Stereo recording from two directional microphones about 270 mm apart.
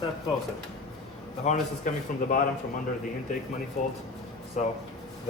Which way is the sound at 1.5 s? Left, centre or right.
Left.